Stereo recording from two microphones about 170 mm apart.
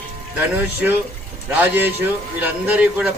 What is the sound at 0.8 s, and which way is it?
A man's voice, 5° right (ahead or behind).